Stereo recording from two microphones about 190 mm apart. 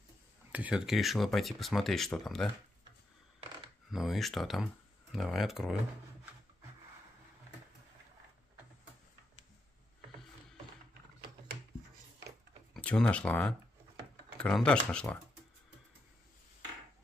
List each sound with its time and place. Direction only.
0.5 s speech: 5° right (ahead or behind)
3.9 s speech: centre (ahead or behind)
12.7 s speech: 5° left (ahead or behind)